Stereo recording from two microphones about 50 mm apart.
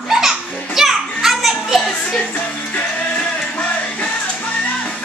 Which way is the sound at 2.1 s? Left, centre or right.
Left.